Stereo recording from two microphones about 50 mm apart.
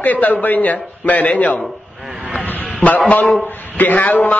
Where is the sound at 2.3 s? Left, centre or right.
Left.